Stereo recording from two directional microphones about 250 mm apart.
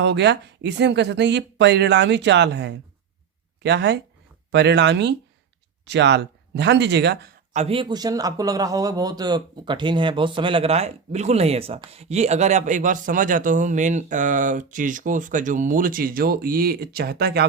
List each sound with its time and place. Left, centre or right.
0.0 s speech: right
7.5 s a man's voice: right